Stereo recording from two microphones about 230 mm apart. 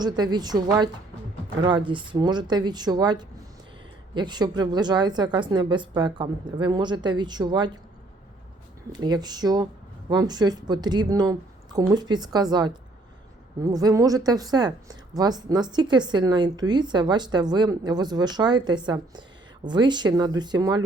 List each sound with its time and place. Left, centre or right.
0.0 s a woman's voice: centre
1.9 s a woman's voice: centre
8.9 s a woman's voice: centre